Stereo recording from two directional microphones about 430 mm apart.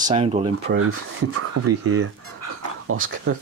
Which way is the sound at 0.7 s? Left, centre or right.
Right.